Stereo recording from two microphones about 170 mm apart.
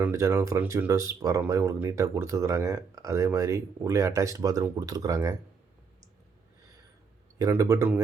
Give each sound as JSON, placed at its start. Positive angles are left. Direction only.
{"t": 0.0, "sound": "speech", "side_deg": -15}
{"t": 7.3, "sound": "speech", "side_deg": -20}